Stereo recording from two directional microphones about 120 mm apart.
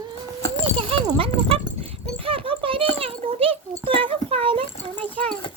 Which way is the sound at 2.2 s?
50° right (ahead or behind).